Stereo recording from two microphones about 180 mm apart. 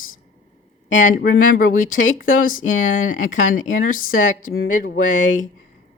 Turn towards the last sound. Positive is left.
turn(degrees=45)  # may be behind; listen again after turning